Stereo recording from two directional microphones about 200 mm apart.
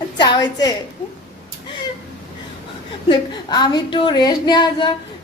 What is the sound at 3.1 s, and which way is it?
A woman's voice, 20° left (ahead or behind).